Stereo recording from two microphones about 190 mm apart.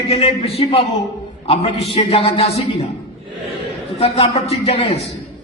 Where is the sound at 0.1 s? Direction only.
30° left (ahead or behind).